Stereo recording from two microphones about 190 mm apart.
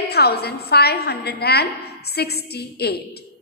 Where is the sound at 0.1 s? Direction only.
55° left (ahead or behind).